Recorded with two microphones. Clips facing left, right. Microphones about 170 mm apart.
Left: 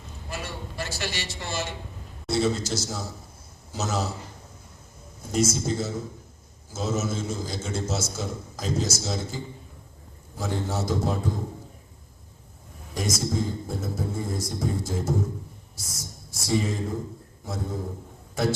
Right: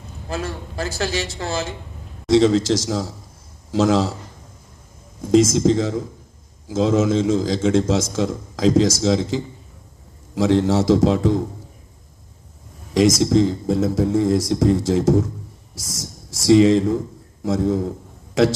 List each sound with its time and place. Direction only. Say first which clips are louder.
2.2 s a man's voice: right 10 dB; 90° right
5.2 s a man's voice: right 11 dB; 90° right
12.9 s a man's voice: right 13 dB; 90° right